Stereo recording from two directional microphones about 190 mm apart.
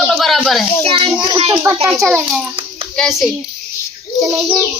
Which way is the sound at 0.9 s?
30° right (ahead or behind).